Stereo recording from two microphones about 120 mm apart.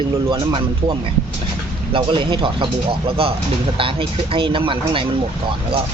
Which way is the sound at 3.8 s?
50° right (ahead or behind).